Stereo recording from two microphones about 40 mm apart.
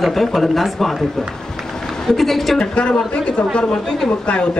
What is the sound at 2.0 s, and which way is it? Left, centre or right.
Speech, centre.